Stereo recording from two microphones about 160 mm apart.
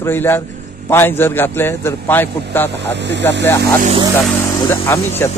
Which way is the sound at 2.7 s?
90° right.